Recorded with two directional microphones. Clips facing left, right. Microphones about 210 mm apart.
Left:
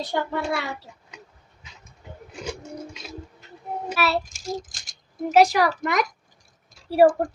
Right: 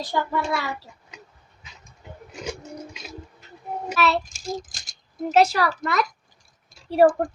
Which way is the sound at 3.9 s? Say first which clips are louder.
Right 2 dB; 5° left (ahead or behind).